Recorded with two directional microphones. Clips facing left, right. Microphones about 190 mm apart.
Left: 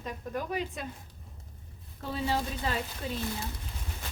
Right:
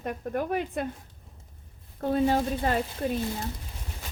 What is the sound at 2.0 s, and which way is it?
Speech, 50° right (ahead or behind).